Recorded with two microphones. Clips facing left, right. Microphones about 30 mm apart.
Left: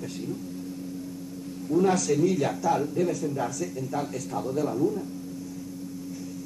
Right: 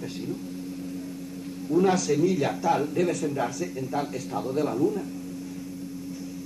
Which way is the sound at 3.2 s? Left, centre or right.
Right.